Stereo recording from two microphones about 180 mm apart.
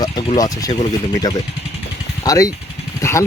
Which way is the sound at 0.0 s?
20° left (ahead or behind).